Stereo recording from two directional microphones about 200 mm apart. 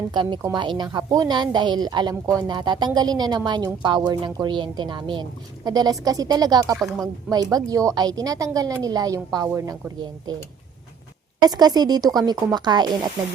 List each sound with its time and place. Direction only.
0.1 s a woman's voice: 20° right (ahead or behind)
11.4 s a woman's voice: 20° right (ahead or behind)